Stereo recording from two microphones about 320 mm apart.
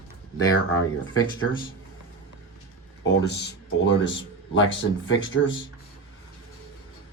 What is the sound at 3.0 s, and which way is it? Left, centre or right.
Speech, left.